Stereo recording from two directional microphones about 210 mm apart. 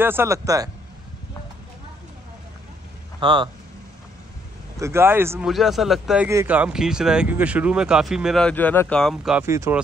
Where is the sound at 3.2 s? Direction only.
25° right (ahead or behind).